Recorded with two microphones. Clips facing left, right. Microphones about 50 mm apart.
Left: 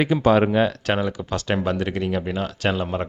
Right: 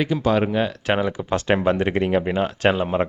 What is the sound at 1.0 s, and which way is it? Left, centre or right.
Speech, right.